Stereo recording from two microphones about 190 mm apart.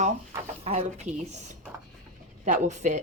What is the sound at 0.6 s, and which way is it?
Speech, 35° right (ahead or behind).